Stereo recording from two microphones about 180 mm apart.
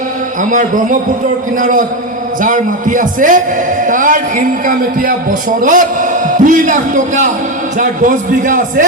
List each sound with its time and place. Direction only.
0.5 s a man's voice: 45° right (ahead or behind)